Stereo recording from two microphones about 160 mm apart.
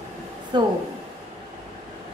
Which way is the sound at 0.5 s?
30° right (ahead or behind).